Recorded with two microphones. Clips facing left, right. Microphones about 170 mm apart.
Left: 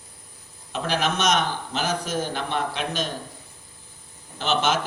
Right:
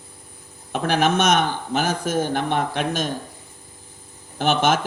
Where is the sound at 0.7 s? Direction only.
55° right (ahead or behind).